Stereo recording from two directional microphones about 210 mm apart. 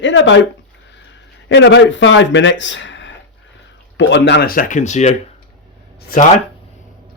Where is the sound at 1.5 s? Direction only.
60° left (ahead or behind); by 5.1 s 35° left (ahead or behind).